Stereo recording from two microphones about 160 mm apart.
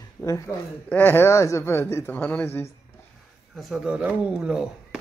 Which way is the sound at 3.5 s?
Centre (ahead or behind).